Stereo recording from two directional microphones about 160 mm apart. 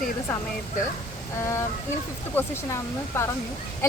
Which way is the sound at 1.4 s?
15° left (ahead or behind).